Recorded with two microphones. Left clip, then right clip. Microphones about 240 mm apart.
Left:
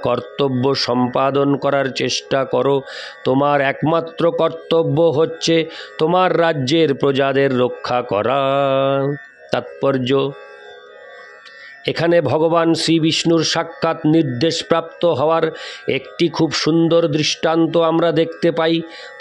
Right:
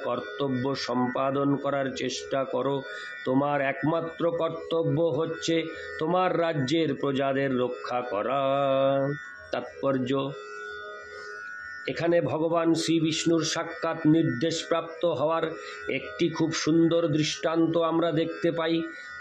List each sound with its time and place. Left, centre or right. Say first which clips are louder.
0.0 s speech: left 11 dB; left
11.8 s a man's voice: left 10 dB; left